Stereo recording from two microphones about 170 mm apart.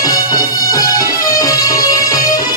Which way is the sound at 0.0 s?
20° left (ahead or behind).